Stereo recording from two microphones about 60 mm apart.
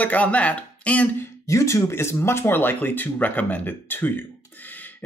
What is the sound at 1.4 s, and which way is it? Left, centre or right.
Speech, left.